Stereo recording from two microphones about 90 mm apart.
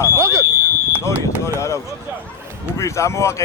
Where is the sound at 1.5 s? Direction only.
35° left (ahead or behind).